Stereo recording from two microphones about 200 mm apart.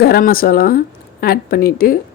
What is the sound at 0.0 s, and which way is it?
Speech, 50° left (ahead or behind).